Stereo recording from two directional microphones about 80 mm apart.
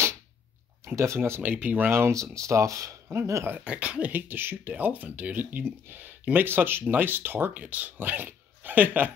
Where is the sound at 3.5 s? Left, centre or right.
Centre.